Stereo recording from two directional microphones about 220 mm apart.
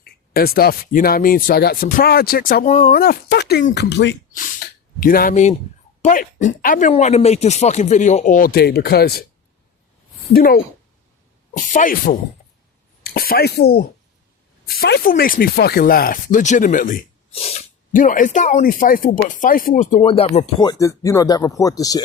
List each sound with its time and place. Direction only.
0.0 s speech: 45° left (ahead or behind)
4.3 s a sound: 40° left (ahead or behind)
6.0 s speech: 35° left (ahead or behind)
10.3 s speech: 40° left (ahead or behind); by 22.0 s 15° left (ahead or behind)